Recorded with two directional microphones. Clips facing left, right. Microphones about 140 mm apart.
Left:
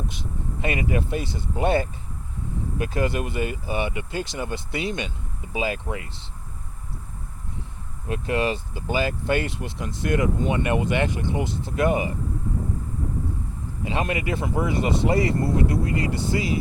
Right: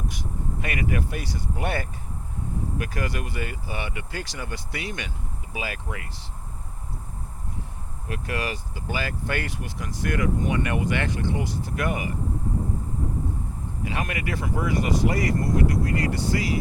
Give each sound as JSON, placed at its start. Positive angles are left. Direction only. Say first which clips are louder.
{"t": 0.1, "sound": "speech", "louder": "even", "side_deg": 25}
{"t": 8.0, "sound": "speech", "louder": "left 6 dB", "side_deg": 25}
{"t": 13.8, "sound": "speech", "louder": "left 4 dB", "side_deg": 25}